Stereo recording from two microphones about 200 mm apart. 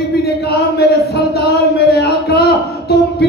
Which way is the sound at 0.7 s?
55° left (ahead or behind).